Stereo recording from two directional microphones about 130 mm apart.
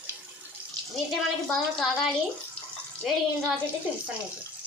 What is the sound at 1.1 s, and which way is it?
Speech, centre (ahead or behind).